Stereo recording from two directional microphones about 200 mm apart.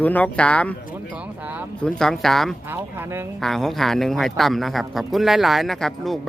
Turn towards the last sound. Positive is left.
turn(degrees=0)  # may be behind; listen again after turning